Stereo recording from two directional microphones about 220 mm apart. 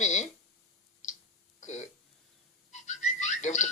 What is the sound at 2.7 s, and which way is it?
Whistling, 30° left (ahead or behind).